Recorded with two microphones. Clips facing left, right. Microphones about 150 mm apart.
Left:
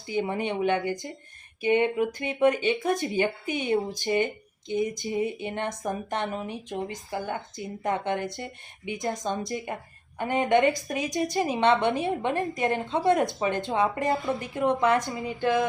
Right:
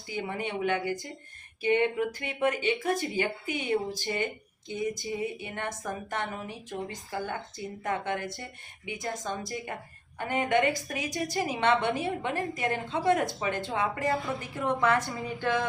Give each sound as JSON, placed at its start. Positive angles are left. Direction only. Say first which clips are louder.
{"t": 0.1, "sound": "a woman's voice", "louder": "left 5 dB", "side_deg": 20}